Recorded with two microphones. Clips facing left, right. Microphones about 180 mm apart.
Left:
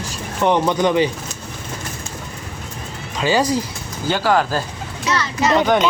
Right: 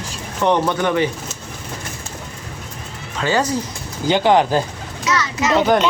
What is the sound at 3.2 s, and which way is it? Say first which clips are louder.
Speech: left 1 dB; 15° left (ahead or behind).